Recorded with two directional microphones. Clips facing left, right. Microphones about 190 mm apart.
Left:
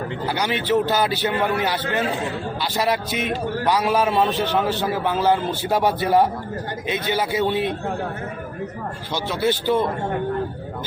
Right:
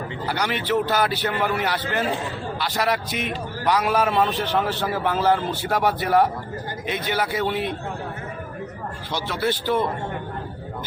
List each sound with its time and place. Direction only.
0.3 s speech: 25° left (ahead or behind)
3.8 s a man's voice: centre (ahead or behind)
4.8 s speech: 20° left (ahead or behind)
9.1 s speech: 25° left (ahead or behind)